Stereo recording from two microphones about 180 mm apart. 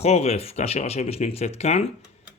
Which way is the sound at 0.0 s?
35° left (ahead or behind).